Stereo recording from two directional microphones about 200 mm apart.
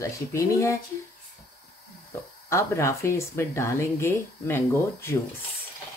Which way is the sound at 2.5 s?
15° left (ahead or behind).